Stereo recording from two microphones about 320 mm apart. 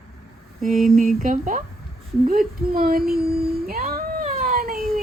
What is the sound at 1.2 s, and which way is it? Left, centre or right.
A woman's voice, right.